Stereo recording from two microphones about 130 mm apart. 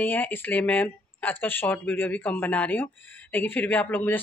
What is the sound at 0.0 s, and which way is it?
Speech, 15° left (ahead or behind).